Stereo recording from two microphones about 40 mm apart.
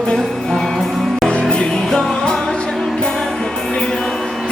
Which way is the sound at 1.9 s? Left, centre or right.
Centre.